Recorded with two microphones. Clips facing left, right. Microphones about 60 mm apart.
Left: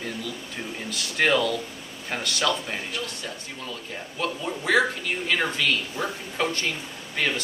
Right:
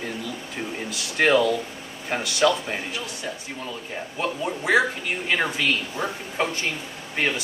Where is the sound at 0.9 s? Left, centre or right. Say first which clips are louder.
Right 3 dB; centre.